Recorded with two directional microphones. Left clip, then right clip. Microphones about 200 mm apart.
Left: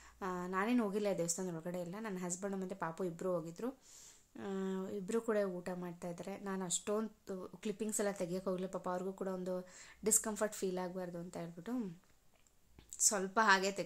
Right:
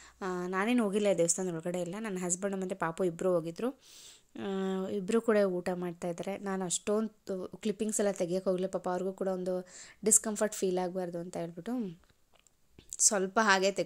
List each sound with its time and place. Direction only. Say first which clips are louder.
0.2 s a woman's voice: right 5 dB; 25° right (ahead or behind)
12.9 s a woman's voice: right 6 dB; 30° right (ahead or behind)